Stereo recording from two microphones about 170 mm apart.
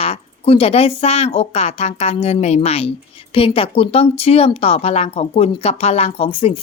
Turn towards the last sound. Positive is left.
turn(degrees=35)  # may be behind; listen again after turning